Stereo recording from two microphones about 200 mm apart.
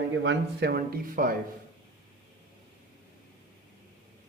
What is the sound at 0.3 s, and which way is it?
A man's voice, 55° right (ahead or behind).